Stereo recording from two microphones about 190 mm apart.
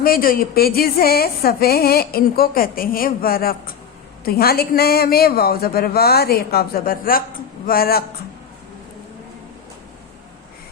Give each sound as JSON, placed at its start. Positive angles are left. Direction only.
{"t": 0.0, "sound": "a woman's voice", "side_deg": 50}